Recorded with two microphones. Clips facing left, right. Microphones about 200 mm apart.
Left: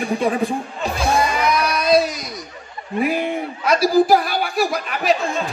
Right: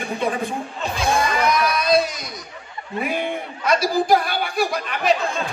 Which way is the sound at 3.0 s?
5° left (ahead or behind).